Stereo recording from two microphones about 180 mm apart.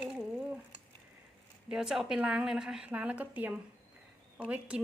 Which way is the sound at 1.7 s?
5° right (ahead or behind).